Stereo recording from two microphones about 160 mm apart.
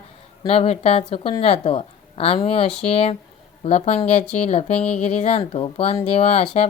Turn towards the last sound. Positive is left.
turn(degrees=40)  # may be behind; listen again after turning